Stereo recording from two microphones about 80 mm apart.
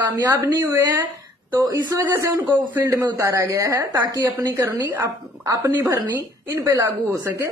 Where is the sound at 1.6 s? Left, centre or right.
Right.